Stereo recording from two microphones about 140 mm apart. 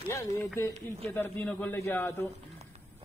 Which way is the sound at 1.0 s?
10° left (ahead or behind).